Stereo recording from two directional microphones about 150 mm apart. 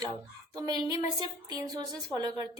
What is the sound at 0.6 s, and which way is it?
A woman's voice, 25° right (ahead or behind).